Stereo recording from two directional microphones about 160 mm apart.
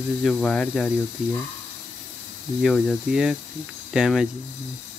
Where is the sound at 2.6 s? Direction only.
Centre (ahead or behind).